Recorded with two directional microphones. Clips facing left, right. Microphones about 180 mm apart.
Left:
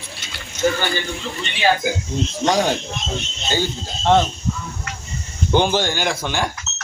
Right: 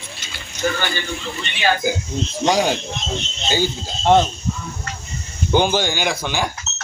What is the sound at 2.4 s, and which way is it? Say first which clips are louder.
Speech: right 1 dB; 5° right (ahead or behind).